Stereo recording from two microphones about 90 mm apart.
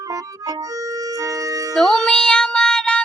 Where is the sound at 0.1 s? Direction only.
45° right (ahead or behind).